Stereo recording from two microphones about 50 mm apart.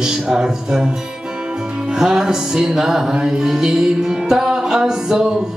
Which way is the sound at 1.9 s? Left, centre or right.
Centre.